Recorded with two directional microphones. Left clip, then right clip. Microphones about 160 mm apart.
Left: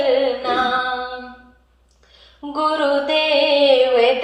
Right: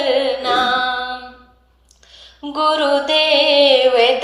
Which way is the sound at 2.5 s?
25° right (ahead or behind).